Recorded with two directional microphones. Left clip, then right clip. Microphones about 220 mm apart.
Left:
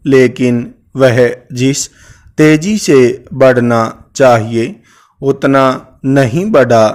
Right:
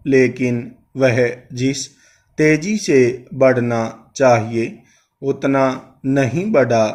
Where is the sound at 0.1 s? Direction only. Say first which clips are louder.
Left 6 dB; 50° left (ahead or behind).